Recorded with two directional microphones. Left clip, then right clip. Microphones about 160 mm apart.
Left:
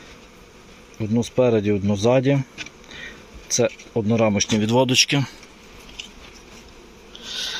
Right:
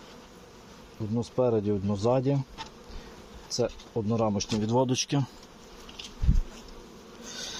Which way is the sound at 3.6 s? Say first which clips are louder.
Left 9 dB; 30° left (ahead or behind).